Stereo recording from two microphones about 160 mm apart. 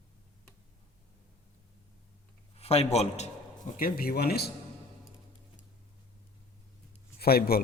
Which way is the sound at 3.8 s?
65° left (ahead or behind).